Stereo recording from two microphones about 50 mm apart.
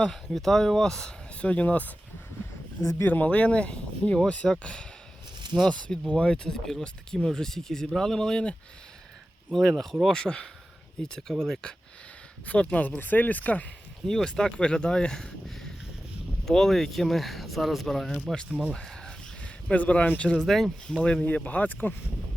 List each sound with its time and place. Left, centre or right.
0.1 s speech: centre
1.4 s speech: left
3.0 s speech: left
3.2 s speech: left
9.5 s speech: centre
12.5 s speech: left
14.1 s speech: centre
16.5 s speech: centre
18.7 s a sound: centre
19.7 s speech: left
20.2 s speech: centre
21.0 s speech: left
21.2 s speech: left